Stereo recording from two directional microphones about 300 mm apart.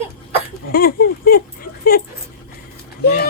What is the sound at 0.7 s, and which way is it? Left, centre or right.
Speech, left.